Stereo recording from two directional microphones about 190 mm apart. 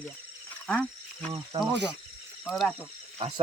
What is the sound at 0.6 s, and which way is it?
Speech, 5° left (ahead or behind).